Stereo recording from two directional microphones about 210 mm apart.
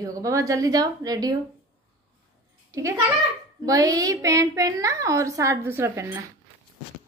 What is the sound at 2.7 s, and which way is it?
A child's voice, 15° right (ahead or behind).